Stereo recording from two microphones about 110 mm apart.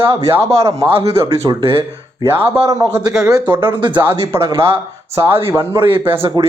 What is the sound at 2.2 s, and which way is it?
Speech, 25° right (ahead or behind).